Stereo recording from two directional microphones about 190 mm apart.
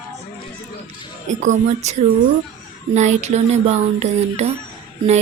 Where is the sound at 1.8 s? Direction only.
35° right (ahead or behind).